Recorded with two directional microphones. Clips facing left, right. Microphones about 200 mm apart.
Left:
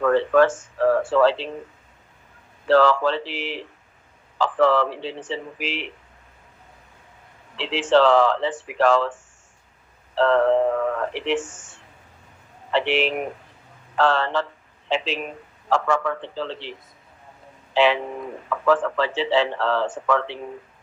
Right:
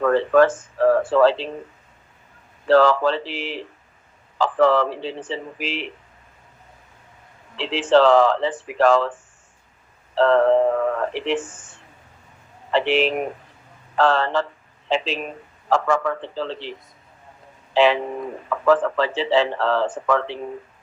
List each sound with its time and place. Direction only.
0.0 s a sound: 40° right (ahead or behind)
1.1 s speech: 40° right (ahead or behind)
2.6 s speech: 40° right (ahead or behind)
7.5 s speech: 40° right (ahead or behind)
10.2 s speech: 40° right (ahead or behind)
12.7 s speech: 40° right (ahead or behind)
17.7 s speech: 40° right (ahead or behind)